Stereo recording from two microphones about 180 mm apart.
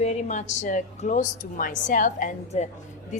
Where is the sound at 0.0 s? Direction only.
40° left (ahead or behind).